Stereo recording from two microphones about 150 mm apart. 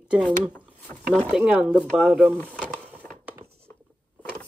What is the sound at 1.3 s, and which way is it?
Speech, 5° right (ahead or behind).